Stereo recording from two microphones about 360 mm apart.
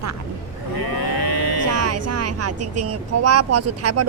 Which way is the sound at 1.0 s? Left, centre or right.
Left.